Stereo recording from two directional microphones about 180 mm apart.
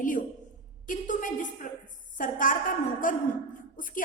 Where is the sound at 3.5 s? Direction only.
50° left (ahead or behind).